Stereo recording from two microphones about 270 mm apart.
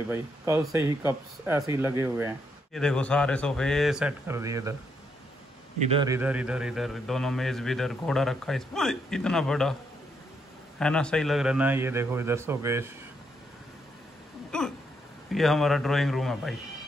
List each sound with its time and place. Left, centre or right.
0.1 s speech: centre
2.7 s speech: centre
5.8 s speech: centre
10.8 s speech: centre
14.5 s a sound: centre
15.3 s speech: centre